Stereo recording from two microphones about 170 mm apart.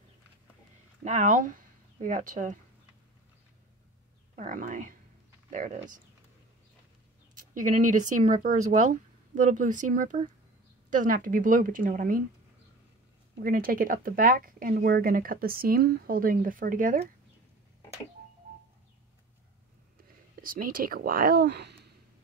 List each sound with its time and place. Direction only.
1.0 s speech: 45° right (ahead or behind)
4.4 s speech: 50° right (ahead or behind)
7.3 s speech: 50° right (ahead or behind)
13.4 s speech: 55° right (ahead or behind)
20.4 s speech: 55° right (ahead or behind); by 21.9 s 75° right (ahead or behind)